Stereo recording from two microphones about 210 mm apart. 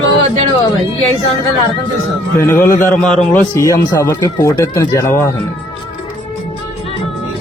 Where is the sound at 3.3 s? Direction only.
15° left (ahead or behind).